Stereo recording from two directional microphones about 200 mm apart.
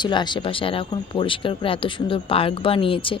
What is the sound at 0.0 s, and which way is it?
Speech, 20° left (ahead or behind).